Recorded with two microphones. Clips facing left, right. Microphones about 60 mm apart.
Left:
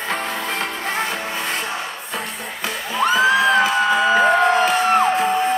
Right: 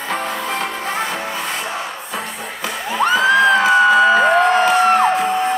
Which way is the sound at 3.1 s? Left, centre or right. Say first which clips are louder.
Right 2 dB; right.